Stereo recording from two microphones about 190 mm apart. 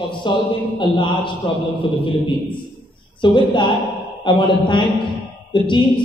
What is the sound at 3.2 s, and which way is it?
A man's voice, 25° left (ahead or behind).